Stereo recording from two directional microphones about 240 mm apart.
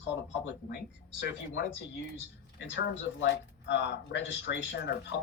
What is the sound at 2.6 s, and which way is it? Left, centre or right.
Coin, left.